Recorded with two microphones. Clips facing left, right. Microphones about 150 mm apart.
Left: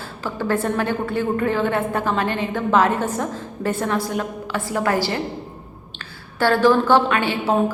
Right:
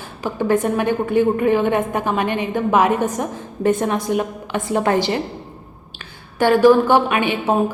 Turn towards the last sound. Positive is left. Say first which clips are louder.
# right 1 dB
turn(degrees=-15)  # may be behind; listen again after turning